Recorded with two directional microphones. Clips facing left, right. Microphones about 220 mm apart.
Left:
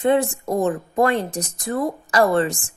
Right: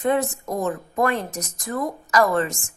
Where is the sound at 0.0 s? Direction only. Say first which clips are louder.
Left 3 dB; 30° left (ahead or behind).